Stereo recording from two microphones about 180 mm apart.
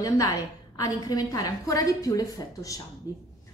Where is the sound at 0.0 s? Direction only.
20° left (ahead or behind).